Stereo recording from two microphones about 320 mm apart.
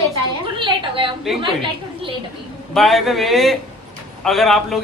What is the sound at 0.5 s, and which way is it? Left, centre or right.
A woman's voice, centre.